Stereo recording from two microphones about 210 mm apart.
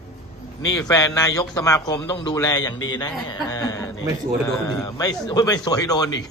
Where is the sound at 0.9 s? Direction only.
15° left (ahead or behind).